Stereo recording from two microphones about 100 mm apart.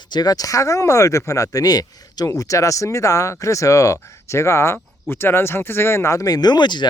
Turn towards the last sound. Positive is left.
turn(degrees=45)  # may be behind; listen again after turning